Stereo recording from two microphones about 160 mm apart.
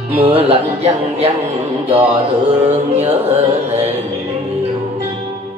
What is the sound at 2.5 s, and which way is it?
Music, 40° right (ahead or behind).